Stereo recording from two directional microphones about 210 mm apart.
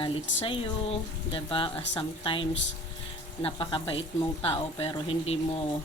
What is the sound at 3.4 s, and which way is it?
A woman's voice, 25° left (ahead or behind).